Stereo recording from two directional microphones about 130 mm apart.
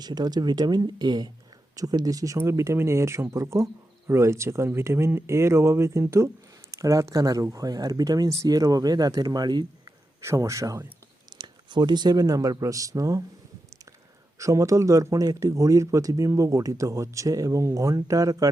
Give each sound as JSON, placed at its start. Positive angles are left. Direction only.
{"t": 0.0, "sound": "speech", "side_deg": -30}
{"t": 10.2, "sound": "speech", "side_deg": -20}
{"t": 11.3, "sound": "speech", "side_deg": -35}
{"t": 14.3, "sound": "speech", "side_deg": -25}